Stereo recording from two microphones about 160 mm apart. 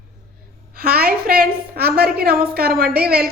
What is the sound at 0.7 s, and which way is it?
A woman's voice, 70° right (ahead or behind).